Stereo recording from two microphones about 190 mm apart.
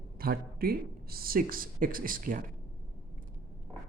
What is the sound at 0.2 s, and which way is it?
Speech, 50° right (ahead or behind).